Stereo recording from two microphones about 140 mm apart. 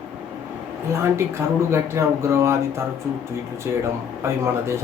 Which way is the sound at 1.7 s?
20° right (ahead or behind).